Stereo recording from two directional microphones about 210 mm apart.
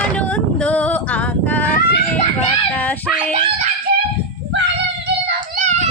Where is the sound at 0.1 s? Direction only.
5° left (ahead or behind).